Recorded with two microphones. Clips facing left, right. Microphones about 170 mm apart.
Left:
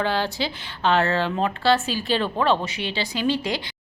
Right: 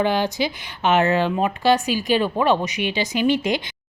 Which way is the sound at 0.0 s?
15° right (ahead or behind).